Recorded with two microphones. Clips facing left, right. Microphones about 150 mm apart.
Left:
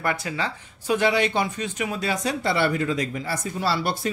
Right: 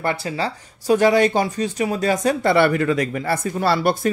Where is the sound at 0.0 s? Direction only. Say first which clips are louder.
Right 4 dB; 30° right (ahead or behind).